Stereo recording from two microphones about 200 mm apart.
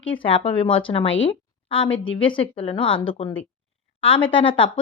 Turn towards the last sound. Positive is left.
turn(degrees=25)  # may be behind; listen again after turning